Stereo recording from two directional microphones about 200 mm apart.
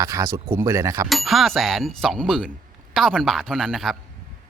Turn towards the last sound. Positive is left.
turn(degrees=0)  # may be behind; listen again after turning